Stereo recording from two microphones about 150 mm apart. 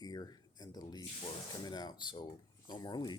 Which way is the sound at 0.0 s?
25° left (ahead or behind).